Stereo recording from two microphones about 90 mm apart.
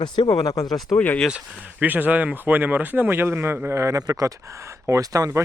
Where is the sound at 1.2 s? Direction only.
15° right (ahead or behind).